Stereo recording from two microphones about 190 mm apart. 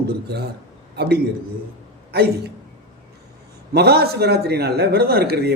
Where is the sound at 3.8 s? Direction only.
55° right (ahead or behind).